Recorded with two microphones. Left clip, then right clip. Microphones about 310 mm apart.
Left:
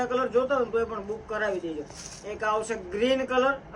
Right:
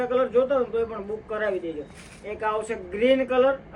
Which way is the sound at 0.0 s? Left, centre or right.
Centre.